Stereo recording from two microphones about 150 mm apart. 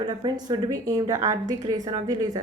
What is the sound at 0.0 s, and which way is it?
A woman's voice, 30° right (ahead or behind).